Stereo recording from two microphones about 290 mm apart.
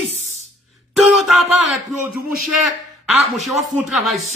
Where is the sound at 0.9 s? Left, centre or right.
Centre.